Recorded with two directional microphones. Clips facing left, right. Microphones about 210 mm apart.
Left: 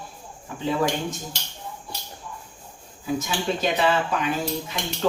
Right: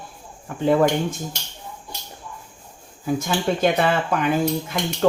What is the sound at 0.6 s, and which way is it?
Speech, 55° right (ahead or behind).